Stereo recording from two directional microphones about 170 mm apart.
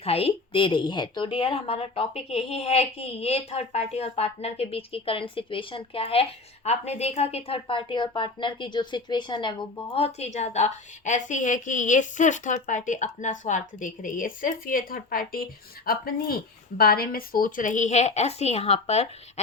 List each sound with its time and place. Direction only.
0.0 s a woman's voice: 35° left (ahead or behind)
9.9 s a woman's voice: 35° left (ahead or behind)